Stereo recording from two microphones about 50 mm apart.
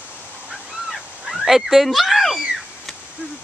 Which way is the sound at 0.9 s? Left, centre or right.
Centre.